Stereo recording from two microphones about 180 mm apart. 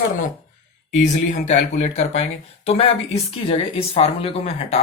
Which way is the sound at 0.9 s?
40° left (ahead or behind).